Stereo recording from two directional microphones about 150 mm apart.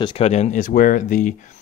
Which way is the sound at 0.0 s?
40° left (ahead or behind).